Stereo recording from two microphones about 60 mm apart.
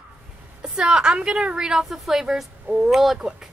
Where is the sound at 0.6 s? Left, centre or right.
Centre.